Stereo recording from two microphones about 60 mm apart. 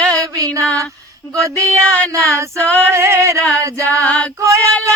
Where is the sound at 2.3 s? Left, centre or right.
Right.